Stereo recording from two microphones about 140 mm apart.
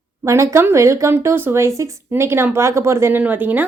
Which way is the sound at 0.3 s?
20° right (ahead or behind).